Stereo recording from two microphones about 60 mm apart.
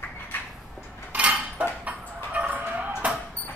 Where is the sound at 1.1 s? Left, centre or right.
Right.